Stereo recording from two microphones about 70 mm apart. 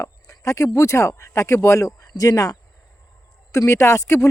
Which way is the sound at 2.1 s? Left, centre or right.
Left.